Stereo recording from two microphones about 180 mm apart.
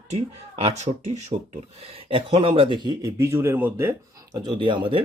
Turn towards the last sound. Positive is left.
turn(degrees=-25)  # may be behind; listen again after turning